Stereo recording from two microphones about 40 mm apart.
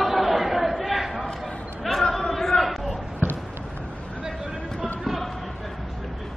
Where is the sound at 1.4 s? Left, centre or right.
Centre.